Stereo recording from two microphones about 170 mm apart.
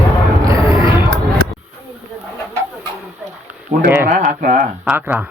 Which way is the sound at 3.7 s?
40° right (ahead or behind).